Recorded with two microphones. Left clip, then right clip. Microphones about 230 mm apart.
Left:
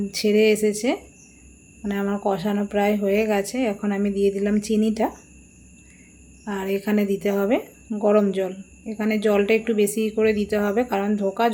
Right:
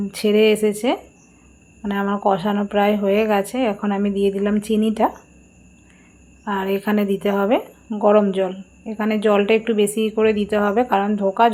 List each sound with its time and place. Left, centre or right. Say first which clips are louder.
0.1 s speech: right 3 dB; centre
6.4 s speech: right 4 dB; centre